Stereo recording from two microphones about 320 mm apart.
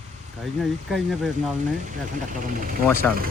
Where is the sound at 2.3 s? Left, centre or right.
Right.